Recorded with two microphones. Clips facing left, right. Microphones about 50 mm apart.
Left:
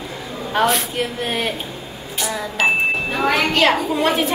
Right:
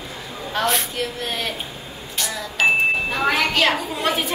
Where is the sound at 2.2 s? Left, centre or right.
Centre.